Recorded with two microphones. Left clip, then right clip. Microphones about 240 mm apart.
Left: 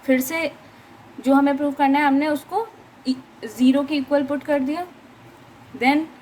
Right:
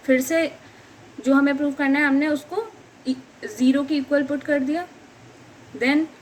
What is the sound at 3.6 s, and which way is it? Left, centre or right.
A woman's voice, left.